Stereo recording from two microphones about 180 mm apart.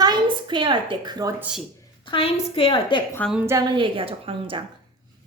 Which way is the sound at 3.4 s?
20° right (ahead or behind).